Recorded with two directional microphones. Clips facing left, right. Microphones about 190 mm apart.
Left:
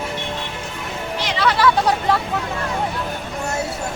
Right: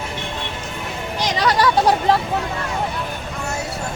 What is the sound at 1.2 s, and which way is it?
Music, 40° right (ahead or behind).